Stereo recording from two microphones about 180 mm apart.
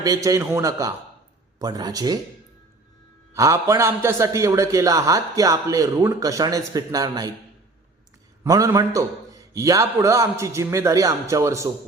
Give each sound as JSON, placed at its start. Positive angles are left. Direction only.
{"t": 0.0, "sound": "a man's voice", "side_deg": -20}
{"t": 3.3, "sound": "a man's voice", "side_deg": -20}
{"t": 8.4, "sound": "a man's voice", "side_deg": -20}